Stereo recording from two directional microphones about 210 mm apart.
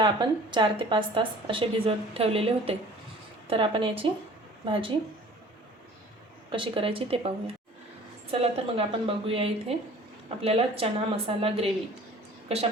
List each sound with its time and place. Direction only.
0.0 s a woman's voice: 20° right (ahead or behind)
6.5 s a woman's voice: 25° right (ahead or behind)